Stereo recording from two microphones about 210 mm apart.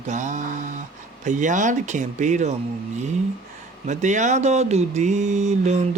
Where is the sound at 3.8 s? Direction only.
35° right (ahead or behind).